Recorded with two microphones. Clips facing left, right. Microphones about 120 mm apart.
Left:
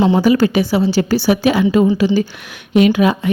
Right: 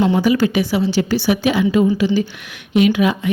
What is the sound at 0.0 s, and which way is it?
Speech, 25° left (ahead or behind).